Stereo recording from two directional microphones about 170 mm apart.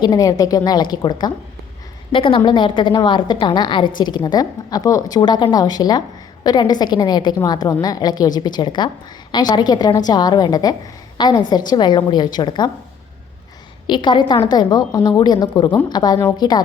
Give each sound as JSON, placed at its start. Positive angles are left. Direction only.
{"t": 0.0, "sound": "a woman's voice", "side_deg": 20}
{"t": 13.8, "sound": "a woman's voice", "side_deg": 25}